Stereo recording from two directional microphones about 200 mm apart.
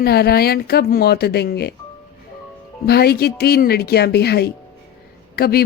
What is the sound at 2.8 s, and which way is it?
Speech, 50° left (ahead or behind).